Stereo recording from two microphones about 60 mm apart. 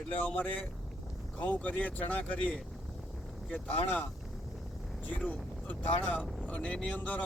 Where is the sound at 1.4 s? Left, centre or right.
Left.